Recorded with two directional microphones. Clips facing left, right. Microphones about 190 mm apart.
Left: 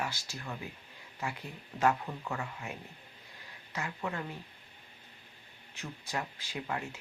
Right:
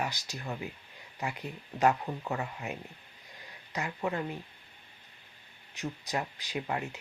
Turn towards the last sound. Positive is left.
turn(degrees=-20)  # may be behind; listen again after turning